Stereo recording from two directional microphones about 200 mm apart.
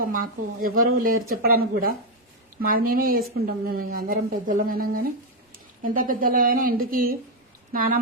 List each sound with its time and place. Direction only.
0.6 s a woman's voice: 45° right (ahead or behind)